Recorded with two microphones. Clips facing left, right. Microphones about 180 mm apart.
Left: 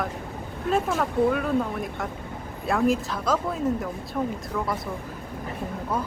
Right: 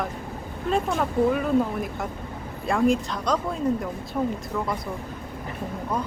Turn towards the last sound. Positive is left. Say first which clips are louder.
# right 1 dB
turn(degrees=-5)  # may be behind; listen again after turning